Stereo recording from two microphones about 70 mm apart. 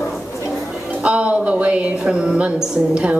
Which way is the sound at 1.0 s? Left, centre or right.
Centre.